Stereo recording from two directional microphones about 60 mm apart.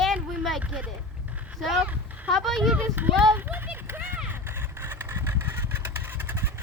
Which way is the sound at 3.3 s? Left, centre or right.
Right.